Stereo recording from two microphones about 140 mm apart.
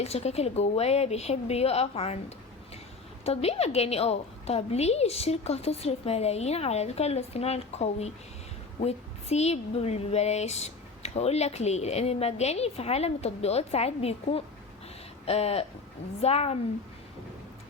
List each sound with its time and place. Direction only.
0.0 s a woman's voice: 50° left (ahead or behind)
3.2 s a woman's voice: 45° left (ahead or behind)